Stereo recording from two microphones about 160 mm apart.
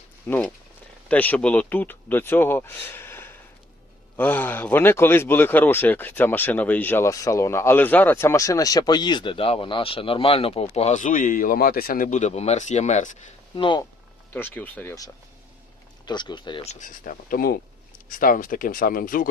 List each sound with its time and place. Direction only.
0.3 s speech: 10° left (ahead or behind); by 13.2 s 50° left (ahead or behind)
13.6 s speech: 30° left (ahead or behind)
14.3 s speech: 10° left (ahead or behind)
16.0 s speech: 30° left (ahead or behind)
16.6 s speech: 55° left (ahead or behind)